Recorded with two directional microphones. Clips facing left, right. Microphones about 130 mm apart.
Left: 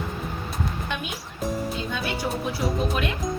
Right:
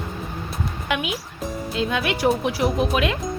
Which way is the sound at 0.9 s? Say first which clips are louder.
Right 12 dB; 90° right.